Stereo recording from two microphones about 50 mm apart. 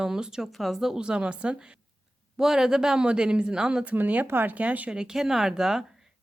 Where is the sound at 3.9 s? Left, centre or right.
Right.